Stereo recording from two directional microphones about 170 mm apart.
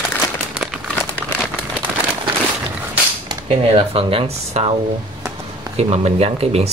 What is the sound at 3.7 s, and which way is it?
Speech, 35° right (ahead or behind).